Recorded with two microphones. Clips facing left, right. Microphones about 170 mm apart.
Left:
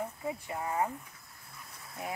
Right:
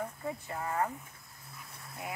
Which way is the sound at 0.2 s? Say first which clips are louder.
Left 1 dB; 15° left (ahead or behind).